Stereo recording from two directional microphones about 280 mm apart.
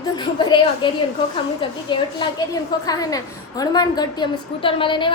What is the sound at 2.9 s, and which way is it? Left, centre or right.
A woman's voice, centre.